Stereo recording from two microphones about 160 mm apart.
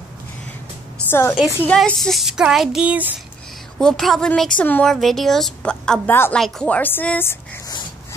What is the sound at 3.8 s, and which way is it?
A woman's voice, centre (ahead or behind).